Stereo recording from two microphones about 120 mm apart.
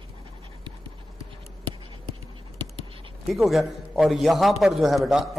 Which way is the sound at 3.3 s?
Centre (ahead or behind).